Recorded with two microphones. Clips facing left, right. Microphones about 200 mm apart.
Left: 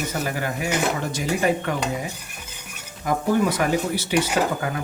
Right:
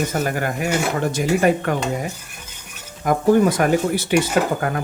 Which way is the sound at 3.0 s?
50° right (ahead or behind).